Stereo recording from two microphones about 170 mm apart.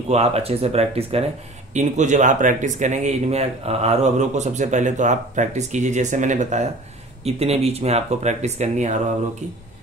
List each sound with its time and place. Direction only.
0.1 s speech: 35° right (ahead or behind)